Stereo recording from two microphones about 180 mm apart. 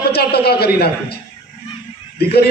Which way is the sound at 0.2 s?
60° left (ahead or behind).